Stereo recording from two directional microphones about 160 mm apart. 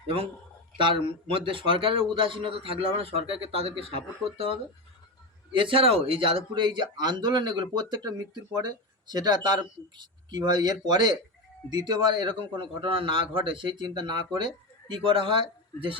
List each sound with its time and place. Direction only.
0.8 s a man's voice: 30° right (ahead or behind)
5.5 s a man's voice: 30° right (ahead or behind)